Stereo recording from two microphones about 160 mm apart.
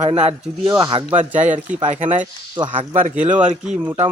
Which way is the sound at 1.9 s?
45° right (ahead or behind).